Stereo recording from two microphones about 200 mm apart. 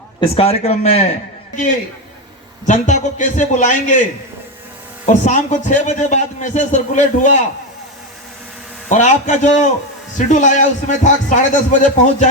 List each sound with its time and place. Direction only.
0.2 s a man's voice: 30° left (ahead or behind)
2.6 s a man's voice: 40° left (ahead or behind)
5.0 s a man's voice: 35° left (ahead or behind)
8.9 s a man's voice: 35° left (ahead or behind)